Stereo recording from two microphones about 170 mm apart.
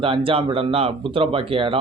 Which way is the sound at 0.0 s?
30° right (ahead or behind).